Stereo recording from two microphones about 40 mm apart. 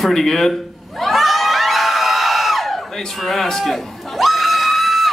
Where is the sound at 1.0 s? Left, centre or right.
Centre.